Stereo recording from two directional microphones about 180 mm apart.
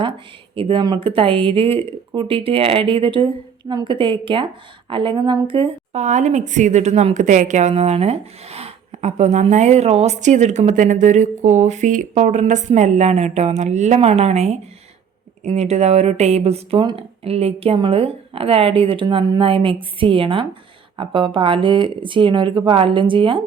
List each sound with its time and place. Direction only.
0.5 s a woman's voice: 30° right (ahead or behind)